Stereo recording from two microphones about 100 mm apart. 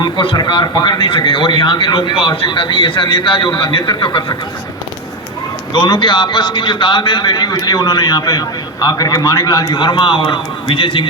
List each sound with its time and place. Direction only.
0.0 s a man's voice: 60° left (ahead or behind)
0.3 s a man's voice: 45° left (ahead or behind)
5.7 s a man's voice: 45° left (ahead or behind)